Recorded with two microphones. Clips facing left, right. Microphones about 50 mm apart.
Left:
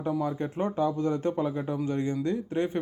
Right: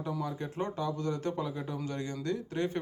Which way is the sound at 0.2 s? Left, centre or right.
Left.